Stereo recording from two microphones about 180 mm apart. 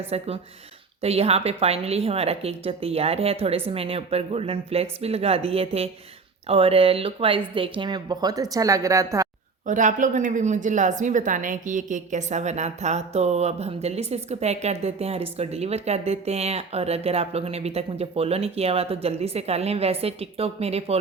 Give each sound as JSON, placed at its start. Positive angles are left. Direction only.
{"t": 0.1, "sound": "speech", "side_deg": -35}
{"t": 9.6, "sound": "speech", "side_deg": -45}